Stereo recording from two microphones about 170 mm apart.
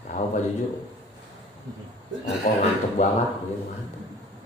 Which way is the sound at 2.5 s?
50° left (ahead or behind).